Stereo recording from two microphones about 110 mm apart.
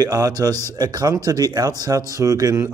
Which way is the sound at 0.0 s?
35° right (ahead or behind).